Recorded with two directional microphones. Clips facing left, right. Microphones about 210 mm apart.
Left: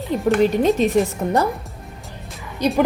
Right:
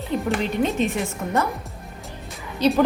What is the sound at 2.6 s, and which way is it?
Speech, 15° left (ahead or behind).